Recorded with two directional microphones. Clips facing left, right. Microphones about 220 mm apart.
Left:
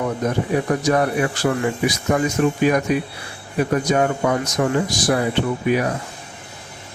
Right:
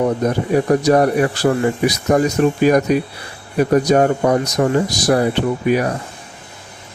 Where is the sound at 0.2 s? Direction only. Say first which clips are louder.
Right 4 dB; 35° right (ahead or behind).